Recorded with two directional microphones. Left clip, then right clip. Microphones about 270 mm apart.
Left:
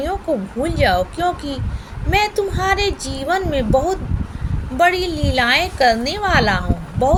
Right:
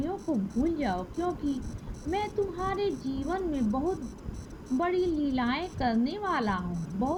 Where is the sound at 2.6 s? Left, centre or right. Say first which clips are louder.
Left 12 dB; right.